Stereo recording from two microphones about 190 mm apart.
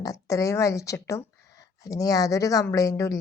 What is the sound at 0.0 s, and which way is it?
Speech, 15° left (ahead or behind).